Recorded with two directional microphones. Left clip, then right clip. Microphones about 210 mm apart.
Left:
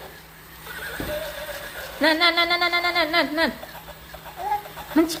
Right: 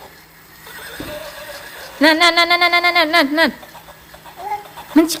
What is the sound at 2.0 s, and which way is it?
Speech, 35° right (ahead or behind).